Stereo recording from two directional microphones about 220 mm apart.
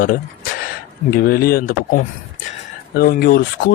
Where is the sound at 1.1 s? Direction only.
45° left (ahead or behind).